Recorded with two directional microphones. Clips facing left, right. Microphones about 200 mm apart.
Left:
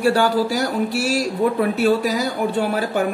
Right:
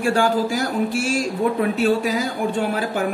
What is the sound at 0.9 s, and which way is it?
Speech, 40° left (ahead or behind).